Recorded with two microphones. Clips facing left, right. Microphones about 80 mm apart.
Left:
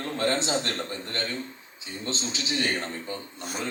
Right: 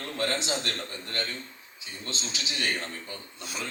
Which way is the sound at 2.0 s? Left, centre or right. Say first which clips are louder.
Left 5 dB; left.